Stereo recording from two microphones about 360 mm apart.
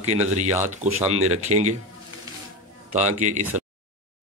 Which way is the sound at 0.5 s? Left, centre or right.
Centre.